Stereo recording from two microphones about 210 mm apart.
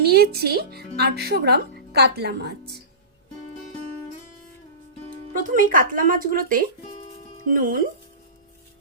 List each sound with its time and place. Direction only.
0.0 s speech: 50° right (ahead or behind)
5.4 s speech: 40° right (ahead or behind)